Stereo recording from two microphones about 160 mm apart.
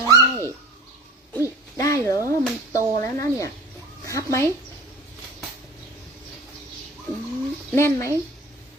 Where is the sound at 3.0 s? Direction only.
20° left (ahead or behind).